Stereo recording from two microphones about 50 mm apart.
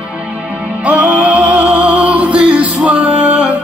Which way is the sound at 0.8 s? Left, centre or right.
Right.